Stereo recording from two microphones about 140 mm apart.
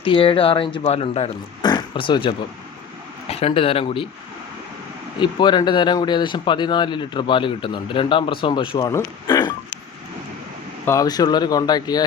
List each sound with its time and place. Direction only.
0.0 s speech: 40° left (ahead or behind)
1.6 s a sound: 35° left (ahead or behind)
3.2 s speech: 45° left (ahead or behind)
5.2 s speech: 30° left (ahead or behind)
8.9 s speech: 25° left (ahead or behind)
10.8 s speech: 25° left (ahead or behind)